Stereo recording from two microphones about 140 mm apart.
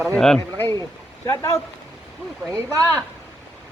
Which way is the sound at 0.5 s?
15° left (ahead or behind).